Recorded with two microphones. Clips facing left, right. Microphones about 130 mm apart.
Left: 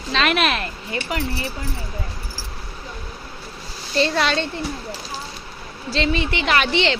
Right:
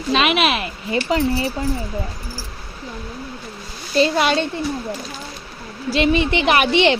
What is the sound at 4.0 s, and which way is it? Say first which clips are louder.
Speech: right 3 dB; 15° right (ahead or behind).